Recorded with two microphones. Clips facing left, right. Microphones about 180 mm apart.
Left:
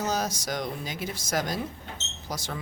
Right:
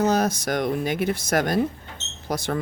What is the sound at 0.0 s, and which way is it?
Speech, 60° right (ahead or behind).